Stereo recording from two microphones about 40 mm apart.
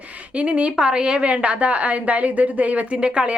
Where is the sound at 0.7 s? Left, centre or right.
Right.